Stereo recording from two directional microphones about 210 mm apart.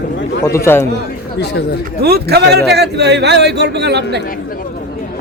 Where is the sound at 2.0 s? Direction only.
50° right (ahead or behind).